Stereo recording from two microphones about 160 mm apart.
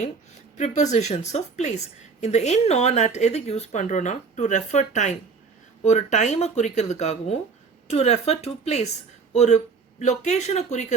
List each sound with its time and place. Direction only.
0.5 s speech: 50° left (ahead or behind)